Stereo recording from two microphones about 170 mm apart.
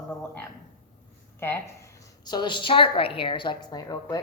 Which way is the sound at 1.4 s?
15° left (ahead or behind).